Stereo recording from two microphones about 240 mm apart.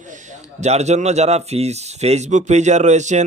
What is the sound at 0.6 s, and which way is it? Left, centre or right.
Speech, right.